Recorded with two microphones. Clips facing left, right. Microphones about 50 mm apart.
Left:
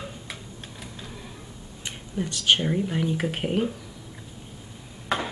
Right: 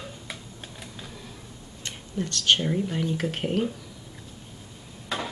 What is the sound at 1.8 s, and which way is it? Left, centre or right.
Speech, centre.